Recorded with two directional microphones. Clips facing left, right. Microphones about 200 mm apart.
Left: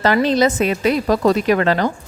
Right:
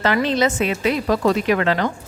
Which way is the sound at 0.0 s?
40° left (ahead or behind).